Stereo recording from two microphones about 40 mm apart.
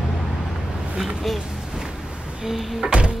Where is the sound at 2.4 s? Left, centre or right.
Centre.